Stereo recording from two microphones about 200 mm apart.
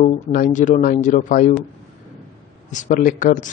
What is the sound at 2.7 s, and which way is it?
Speech, 40° left (ahead or behind).